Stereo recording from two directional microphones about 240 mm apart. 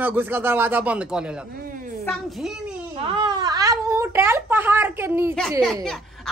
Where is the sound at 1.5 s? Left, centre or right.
Right.